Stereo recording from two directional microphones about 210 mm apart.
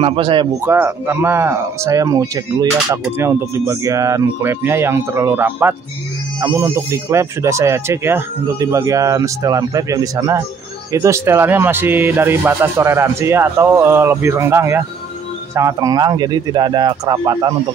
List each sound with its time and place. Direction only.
0.0 s speech: 25° right (ahead or behind)
0.7 s speech: 10° right (ahead or behind)